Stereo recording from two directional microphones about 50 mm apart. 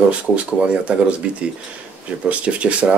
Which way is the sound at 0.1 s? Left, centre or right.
Right.